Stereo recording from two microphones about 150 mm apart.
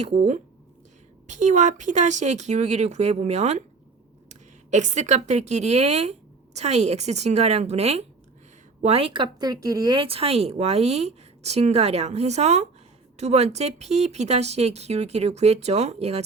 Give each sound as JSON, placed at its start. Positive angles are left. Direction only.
{"t": 0.0, "sound": "speech", "side_deg": -45}